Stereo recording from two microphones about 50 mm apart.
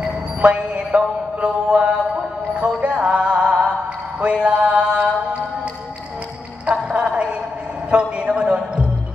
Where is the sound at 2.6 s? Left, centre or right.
Right.